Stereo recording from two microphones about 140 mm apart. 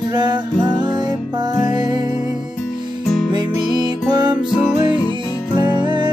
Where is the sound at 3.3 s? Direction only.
30° right (ahead or behind).